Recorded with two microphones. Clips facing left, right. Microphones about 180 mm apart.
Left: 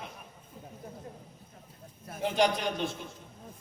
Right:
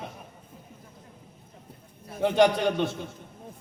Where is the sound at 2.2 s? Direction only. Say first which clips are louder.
Right 6 dB; 65° right (ahead or behind).